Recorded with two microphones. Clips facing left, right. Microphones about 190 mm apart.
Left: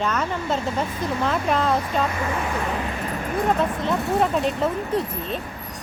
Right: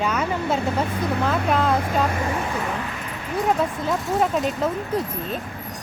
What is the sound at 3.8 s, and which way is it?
A woman's voice, centre (ahead or behind).